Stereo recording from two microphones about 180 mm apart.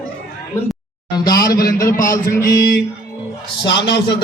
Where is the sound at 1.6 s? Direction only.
50° left (ahead or behind).